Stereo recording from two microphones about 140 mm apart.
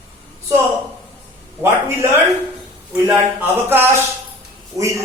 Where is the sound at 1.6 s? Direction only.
20° right (ahead or behind).